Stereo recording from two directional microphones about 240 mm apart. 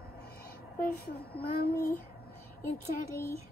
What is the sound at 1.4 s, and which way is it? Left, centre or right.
Child singing, left.